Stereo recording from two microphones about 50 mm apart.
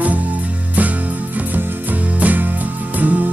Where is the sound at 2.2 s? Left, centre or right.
Right.